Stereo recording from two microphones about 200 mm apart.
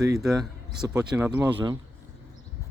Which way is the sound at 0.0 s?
15° right (ahead or behind).